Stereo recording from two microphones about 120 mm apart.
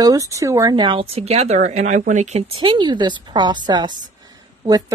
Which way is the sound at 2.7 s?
40° right (ahead or behind).